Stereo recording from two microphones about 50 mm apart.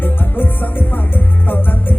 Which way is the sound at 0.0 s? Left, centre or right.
Left.